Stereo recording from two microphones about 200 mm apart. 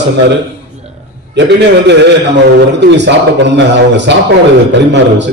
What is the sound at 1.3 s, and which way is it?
A man's voice, 60° right (ahead or behind).